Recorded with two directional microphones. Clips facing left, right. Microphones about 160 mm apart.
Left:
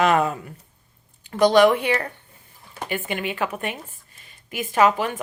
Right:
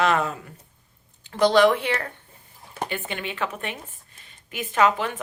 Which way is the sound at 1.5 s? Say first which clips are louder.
Left 2 dB; 10° left (ahead or behind).